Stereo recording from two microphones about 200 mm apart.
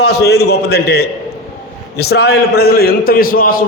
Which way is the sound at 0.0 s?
55° left (ahead or behind).